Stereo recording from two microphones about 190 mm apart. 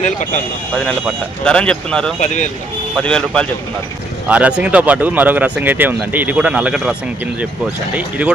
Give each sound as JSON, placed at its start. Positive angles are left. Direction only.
{"t": 0.7, "sound": "speech", "side_deg": 5}
{"t": 2.2, "sound": "speech", "side_deg": 40}
{"t": 2.9, "sound": "speech", "side_deg": 5}
{"t": 4.3, "sound": "speech", "side_deg": -5}